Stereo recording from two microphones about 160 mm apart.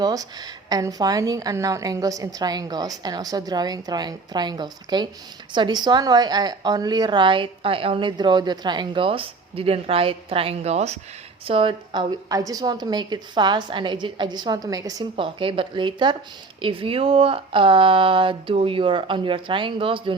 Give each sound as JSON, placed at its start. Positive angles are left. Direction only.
{"t": 0.0, "sound": "a woman's voice", "side_deg": -25}
{"t": 12.3, "sound": "a woman's voice", "side_deg": -20}
{"t": 15.1, "sound": "speech", "side_deg": -35}